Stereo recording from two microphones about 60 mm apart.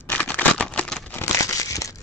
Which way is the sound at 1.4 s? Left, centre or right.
Left.